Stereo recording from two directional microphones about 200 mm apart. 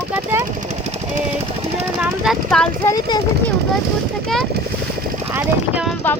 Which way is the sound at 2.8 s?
20° left (ahead or behind).